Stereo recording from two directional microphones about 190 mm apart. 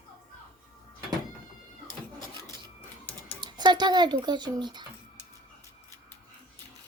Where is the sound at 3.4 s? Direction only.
20° right (ahead or behind).